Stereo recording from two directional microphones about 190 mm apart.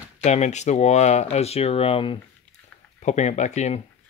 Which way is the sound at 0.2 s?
40° left (ahead or behind).